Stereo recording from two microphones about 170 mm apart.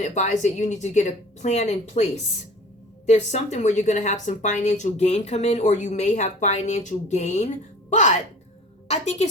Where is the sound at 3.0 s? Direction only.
40° left (ahead or behind).